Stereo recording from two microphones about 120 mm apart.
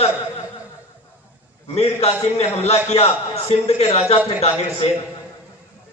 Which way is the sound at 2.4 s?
60° left (ahead or behind).